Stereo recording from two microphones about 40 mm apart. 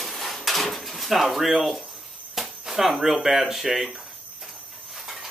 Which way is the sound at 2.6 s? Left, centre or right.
Centre.